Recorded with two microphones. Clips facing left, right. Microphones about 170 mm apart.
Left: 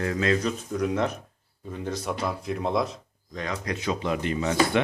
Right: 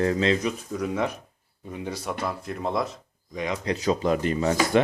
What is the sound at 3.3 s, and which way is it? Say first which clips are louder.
Speech: right 3 dB; 15° right (ahead or behind).